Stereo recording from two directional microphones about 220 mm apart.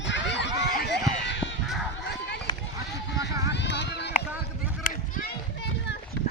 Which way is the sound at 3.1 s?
50° left (ahead or behind).